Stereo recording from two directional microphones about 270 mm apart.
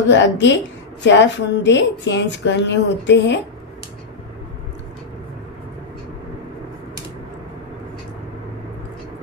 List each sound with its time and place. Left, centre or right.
0.1 s a woman's voice: left